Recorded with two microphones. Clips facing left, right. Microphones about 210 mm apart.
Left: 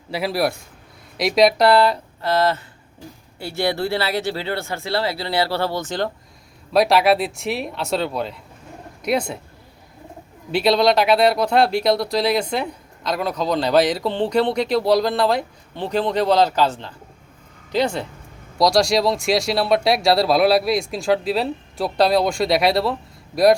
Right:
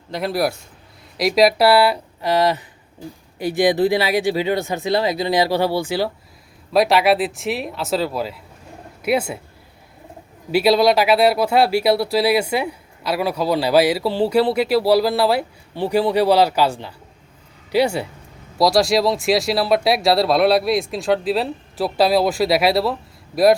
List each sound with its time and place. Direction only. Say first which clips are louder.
0.1 s speech: even; centre (ahead or behind)
10.5 s speech: right 2 dB; 5° right (ahead or behind)